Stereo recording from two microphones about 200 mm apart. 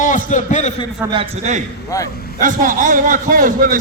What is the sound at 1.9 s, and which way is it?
Speech, 15° left (ahead or behind).